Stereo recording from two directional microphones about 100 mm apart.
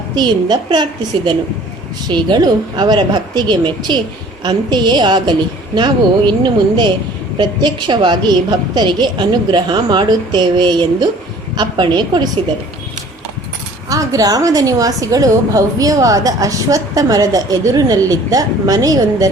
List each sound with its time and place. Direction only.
0.2 s a woman's voice: 50° right (ahead or behind)
13.9 s a woman's voice: 35° right (ahead or behind)